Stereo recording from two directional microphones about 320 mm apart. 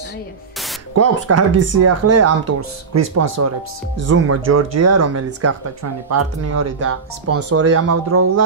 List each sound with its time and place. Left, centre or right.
0.9 s speech: right